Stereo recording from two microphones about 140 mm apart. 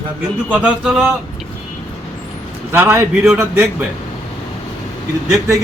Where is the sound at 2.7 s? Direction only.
15° right (ahead or behind).